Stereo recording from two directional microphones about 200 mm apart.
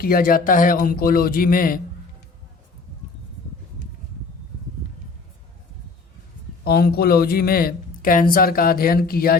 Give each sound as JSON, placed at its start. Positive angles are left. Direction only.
{"t": 0.0, "sound": "speech", "side_deg": 45}
{"t": 6.7, "sound": "speech", "side_deg": 50}